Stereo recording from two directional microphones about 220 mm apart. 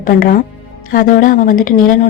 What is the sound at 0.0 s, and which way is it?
A woman's voice, 40° left (ahead or behind).